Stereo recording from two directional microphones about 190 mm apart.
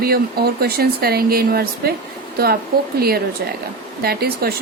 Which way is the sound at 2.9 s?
55° right (ahead or behind).